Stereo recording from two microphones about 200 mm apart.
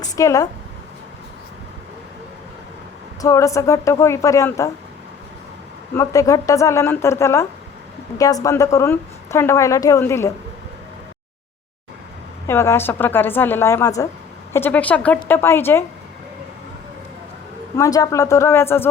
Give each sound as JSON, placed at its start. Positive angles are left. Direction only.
{"t": 0.0, "sound": "a woman's voice", "side_deg": 15}
{"t": 3.2, "sound": "a woman's voice", "side_deg": 15}
{"t": 6.0, "sound": "a woman's voice", "side_deg": 15}
{"t": 12.5, "sound": "a woman's voice", "side_deg": 10}
{"t": 17.7, "sound": "a woman's voice", "side_deg": 15}